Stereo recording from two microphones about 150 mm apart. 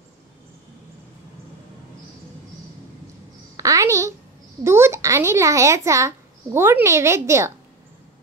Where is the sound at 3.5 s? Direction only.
20° right (ahead or behind).